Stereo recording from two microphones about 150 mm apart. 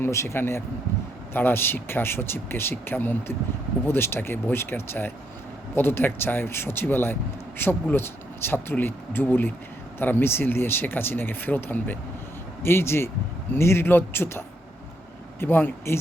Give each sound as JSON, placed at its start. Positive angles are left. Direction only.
{"t": 0.0, "sound": "speech", "side_deg": 20}